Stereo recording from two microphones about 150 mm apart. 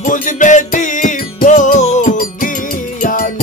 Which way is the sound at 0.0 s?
60° left (ahead or behind).